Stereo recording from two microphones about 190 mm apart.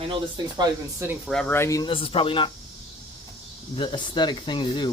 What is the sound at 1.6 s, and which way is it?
Speech, 20° left (ahead or behind).